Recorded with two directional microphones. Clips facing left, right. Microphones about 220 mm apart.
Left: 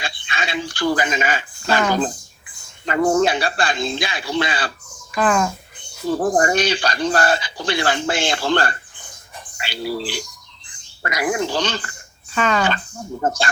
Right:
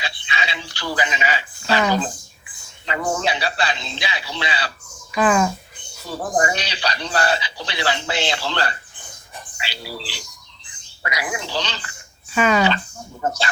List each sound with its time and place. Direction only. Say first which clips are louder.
0.0 s speech: left 1 dB; 50° left (ahead or behind)
2.8 s speech: left 7 dB; 50° left (ahead or behind)
5.1 s speech: right 1 dB; centre (ahead or behind)
6.3 s speech: left 5 dB; 50° left (ahead or behind)
12.3 s speech: right 2 dB; 10° right (ahead or behind)
13.2 s speech: left 2 dB; 50° left (ahead or behind)